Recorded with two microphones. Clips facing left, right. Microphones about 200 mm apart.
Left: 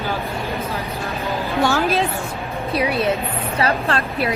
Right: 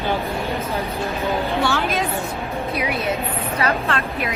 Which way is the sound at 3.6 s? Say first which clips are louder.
Left 2 dB; 35° left (ahead or behind).